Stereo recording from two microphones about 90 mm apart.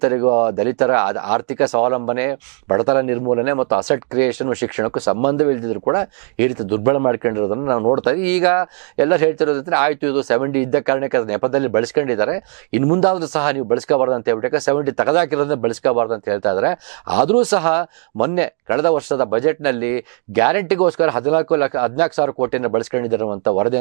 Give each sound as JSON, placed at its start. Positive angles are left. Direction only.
{"t": 0.0, "sound": "speech", "side_deg": -20}